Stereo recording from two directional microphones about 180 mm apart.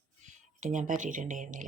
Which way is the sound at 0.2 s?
45° right (ahead or behind).